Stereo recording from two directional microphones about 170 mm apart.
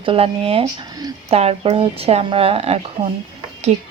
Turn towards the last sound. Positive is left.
turn(degrees=-40)  # may be behind; listen again after turning